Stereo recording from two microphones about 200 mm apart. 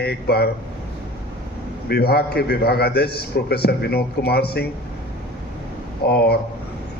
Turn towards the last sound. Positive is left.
turn(degrees=55)  # may be behind; listen again after turning